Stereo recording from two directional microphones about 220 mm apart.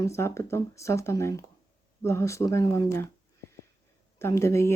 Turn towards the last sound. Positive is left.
turn(degrees=10)  # may be behind; listen again after turning